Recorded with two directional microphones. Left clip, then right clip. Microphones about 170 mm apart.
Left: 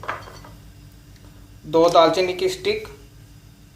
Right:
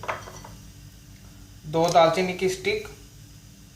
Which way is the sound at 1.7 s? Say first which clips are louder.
Left 4 dB; 45° left (ahead or behind).